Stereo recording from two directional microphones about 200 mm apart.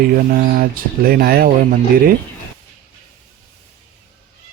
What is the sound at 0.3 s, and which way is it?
Speech, 45° right (ahead or behind).